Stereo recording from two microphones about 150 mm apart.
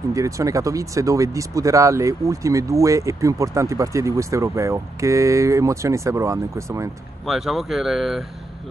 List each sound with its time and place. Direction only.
0.1 s speech: 20° right (ahead or behind)
7.2 s speech: centre (ahead or behind)